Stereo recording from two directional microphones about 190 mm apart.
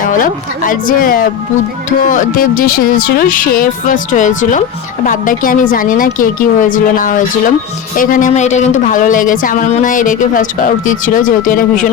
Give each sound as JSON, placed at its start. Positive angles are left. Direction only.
{"t": 0.1, "sound": "speech", "side_deg": 45}